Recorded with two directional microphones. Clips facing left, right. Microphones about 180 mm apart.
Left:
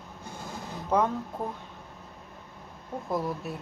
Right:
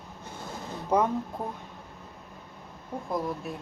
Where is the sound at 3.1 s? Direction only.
Centre (ahead or behind).